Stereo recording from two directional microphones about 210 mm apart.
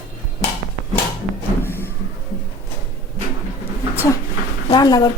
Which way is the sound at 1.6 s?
10° left (ahead or behind).